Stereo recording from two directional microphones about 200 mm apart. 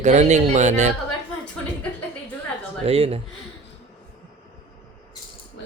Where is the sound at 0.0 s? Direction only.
35° right (ahead or behind).